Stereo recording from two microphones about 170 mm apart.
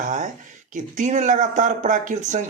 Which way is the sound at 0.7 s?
45° right (ahead or behind).